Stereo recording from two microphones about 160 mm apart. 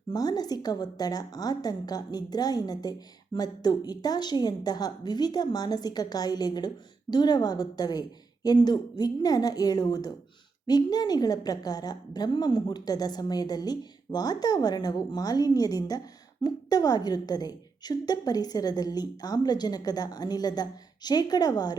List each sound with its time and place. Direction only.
0.1 s a woman's voice: 25° left (ahead or behind)